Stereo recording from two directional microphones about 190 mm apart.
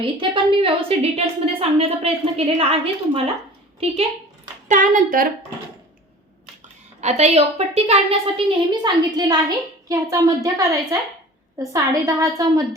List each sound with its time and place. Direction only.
0.0 s a woman's voice: 25° right (ahead or behind)
4.7 s a woman's voice: 45° right (ahead or behind)
7.0 s a woman's voice: 35° right (ahead or behind); by 12.6 s 15° right (ahead or behind)